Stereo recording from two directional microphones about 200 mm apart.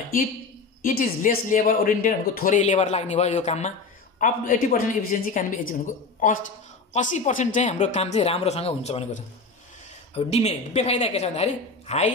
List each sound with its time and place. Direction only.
0.8 s speech: 45° left (ahead or behind)